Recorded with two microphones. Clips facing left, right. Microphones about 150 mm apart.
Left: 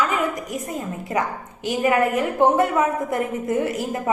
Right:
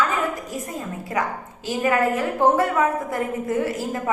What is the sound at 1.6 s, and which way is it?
A woman's voice, 20° left (ahead or behind).